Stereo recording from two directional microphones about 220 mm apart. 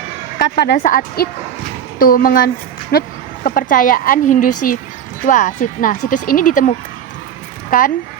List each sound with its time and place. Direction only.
0.3 s speech: 50° left (ahead or behind)